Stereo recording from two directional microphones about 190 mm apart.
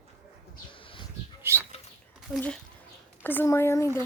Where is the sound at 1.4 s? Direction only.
10° right (ahead or behind).